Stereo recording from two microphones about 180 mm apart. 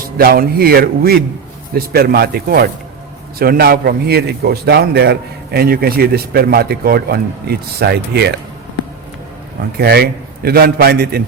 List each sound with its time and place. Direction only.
0.2 s a man's voice: 60° right (ahead or behind)
9.7 s a man's voice: 60° right (ahead or behind)